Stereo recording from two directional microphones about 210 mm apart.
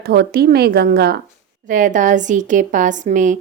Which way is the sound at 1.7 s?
35° right (ahead or behind).